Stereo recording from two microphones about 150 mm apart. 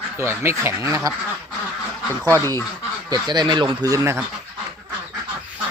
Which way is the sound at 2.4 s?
15° left (ahead or behind).